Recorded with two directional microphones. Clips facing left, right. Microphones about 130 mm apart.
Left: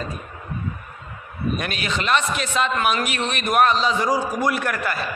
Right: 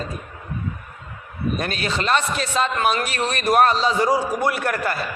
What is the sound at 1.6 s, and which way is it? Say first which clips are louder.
A man's voice: right 2 dB; 35° right (ahead or behind).